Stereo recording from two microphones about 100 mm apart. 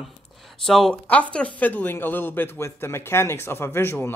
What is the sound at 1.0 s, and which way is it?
Speech, 15° left (ahead or behind).